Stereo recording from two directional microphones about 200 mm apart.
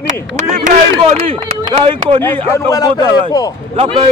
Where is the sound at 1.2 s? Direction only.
25° right (ahead or behind).